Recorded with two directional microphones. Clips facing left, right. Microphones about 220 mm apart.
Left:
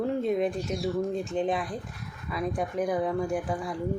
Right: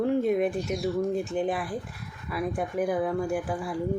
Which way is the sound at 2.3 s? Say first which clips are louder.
Right 1 dB; 5° right (ahead or behind).